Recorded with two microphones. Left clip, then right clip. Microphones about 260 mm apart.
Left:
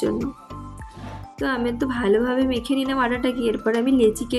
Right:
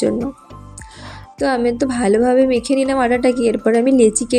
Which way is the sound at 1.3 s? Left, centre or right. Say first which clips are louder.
Right 7 dB; centre.